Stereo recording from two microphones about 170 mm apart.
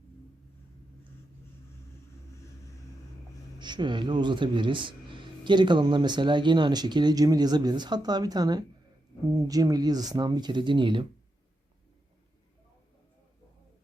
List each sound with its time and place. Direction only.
3.6 s speech: 25° right (ahead or behind)